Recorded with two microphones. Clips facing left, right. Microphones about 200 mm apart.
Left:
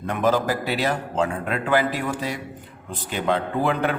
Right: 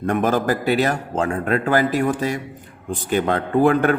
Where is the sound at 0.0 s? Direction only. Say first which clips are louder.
Right 2 dB; 50° right (ahead or behind).